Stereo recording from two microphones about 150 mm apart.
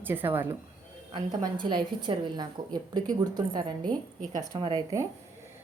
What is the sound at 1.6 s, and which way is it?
A woman's voice, 35° right (ahead or behind).